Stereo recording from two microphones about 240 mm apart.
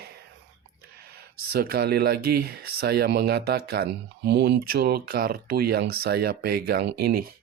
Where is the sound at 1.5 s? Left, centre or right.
Right.